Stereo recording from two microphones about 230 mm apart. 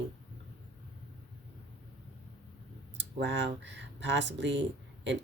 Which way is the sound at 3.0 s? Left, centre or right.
Right.